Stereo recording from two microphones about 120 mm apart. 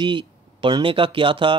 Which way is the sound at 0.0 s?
45° right (ahead or behind).